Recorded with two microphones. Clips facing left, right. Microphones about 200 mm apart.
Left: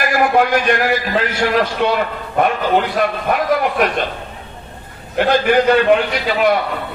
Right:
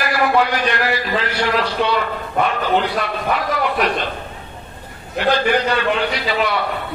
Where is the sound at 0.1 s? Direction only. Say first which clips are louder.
Left 3 dB; 50° left (ahead or behind).